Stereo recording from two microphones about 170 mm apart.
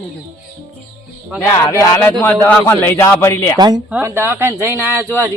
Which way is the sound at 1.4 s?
15° left (ahead or behind).